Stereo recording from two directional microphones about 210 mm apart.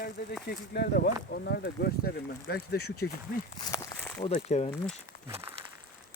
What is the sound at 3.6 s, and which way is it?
Walk, 15° left (ahead or behind).